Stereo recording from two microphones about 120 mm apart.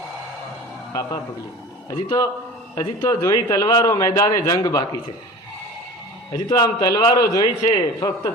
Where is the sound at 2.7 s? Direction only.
30° left (ahead or behind).